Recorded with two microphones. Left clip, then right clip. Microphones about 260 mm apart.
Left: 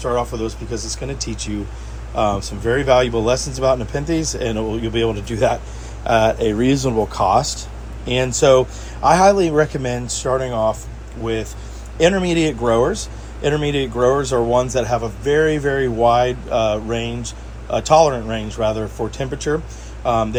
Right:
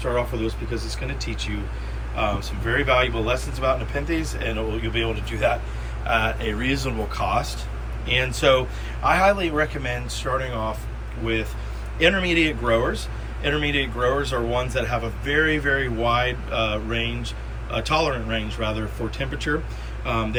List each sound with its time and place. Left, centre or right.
0.0 s speech: centre
11.9 s a man's voice: centre